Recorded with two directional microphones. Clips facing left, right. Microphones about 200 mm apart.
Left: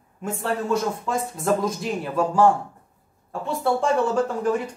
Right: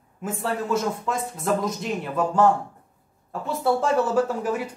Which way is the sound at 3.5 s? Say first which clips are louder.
Even; 5° right (ahead or behind).